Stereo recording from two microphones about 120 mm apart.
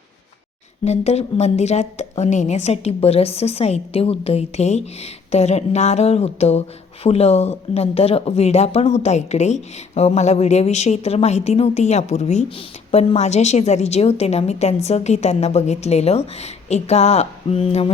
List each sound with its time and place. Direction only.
0.9 s a woman's voice: 65° left (ahead or behind)
12.5 s a woman's voice: 55° left (ahead or behind)